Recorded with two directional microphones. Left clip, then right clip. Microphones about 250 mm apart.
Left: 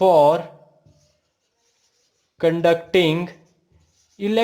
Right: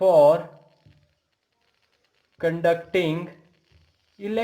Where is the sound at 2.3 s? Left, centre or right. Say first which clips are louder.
Left 4 dB; left.